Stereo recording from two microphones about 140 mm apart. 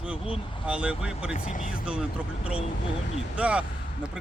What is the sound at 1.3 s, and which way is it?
Speech, 70° left (ahead or behind).